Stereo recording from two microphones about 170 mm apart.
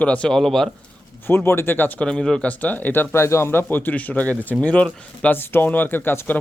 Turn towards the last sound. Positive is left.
turn(degrees=15)  # may be behind; listen again after turning